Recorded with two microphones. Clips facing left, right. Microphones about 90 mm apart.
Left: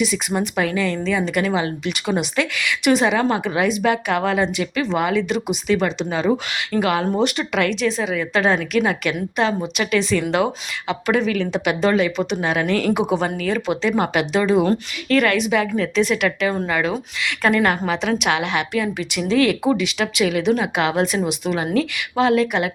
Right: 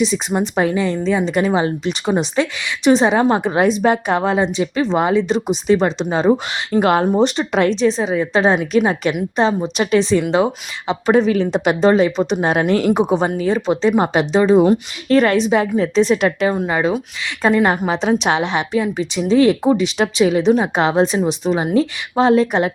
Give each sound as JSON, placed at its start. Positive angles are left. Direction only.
{"t": 0.0, "sound": "a woman's voice", "side_deg": -30}
{"t": 15.1, "sound": "speech", "side_deg": -35}
{"t": 16.6, "sound": "a woman's voice", "side_deg": -25}
{"t": 17.8, "sound": "a woman's voice", "side_deg": -30}